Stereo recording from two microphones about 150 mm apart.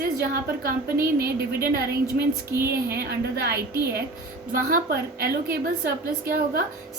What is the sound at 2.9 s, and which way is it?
A woman's voice, 90° right.